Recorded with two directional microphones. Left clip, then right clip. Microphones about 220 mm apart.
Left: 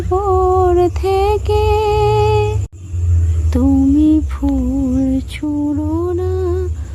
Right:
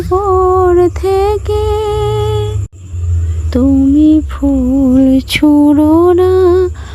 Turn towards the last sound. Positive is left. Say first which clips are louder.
# right 11 dB
turn(degrees=-40)  # may be behind; listen again after turning